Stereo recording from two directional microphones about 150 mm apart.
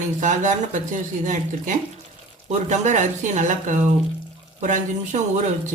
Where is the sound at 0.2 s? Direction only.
55° right (ahead or behind).